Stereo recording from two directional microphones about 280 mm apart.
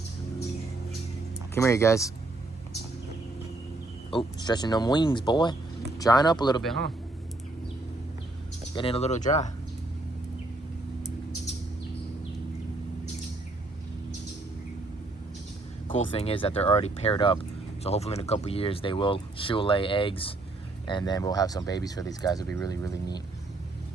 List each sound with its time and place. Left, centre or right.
1.5 s speech: centre
4.1 s speech: centre
6.6 s a man's voice: centre
8.7 s speech: centre
15.9 s speech: left